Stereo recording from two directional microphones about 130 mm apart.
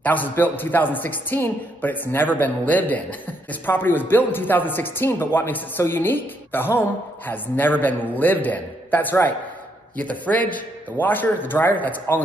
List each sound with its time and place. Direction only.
0.0 s speech: 15° left (ahead or behind)